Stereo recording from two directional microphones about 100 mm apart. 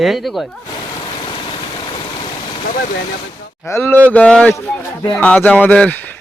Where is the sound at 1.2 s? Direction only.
55° left (ahead or behind).